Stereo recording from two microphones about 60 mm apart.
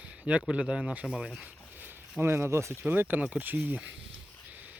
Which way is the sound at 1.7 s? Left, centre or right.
Right.